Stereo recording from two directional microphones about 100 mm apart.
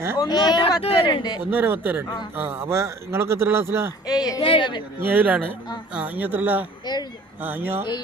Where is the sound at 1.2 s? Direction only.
45° left (ahead or behind).